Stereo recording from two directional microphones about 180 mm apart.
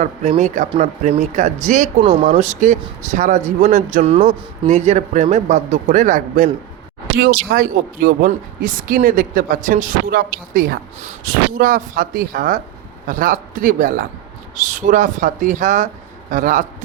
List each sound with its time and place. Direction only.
0.0 s a man's voice: 40° right (ahead or behind)